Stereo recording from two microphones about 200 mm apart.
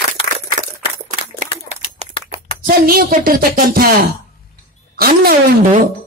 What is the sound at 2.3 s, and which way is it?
Speech, 45° right (ahead or behind).